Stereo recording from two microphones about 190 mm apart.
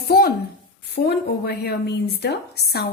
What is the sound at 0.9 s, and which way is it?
A woman's voice, 55° left (ahead or behind).